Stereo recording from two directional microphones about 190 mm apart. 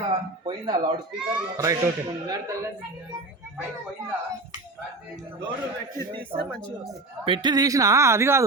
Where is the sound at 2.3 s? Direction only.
15° right (ahead or behind).